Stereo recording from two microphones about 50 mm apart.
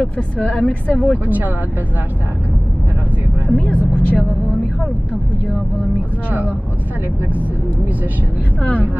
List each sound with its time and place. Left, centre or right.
0.5 s a woman's voice: left
1.2 s speech: right
3.4 s vehicle: left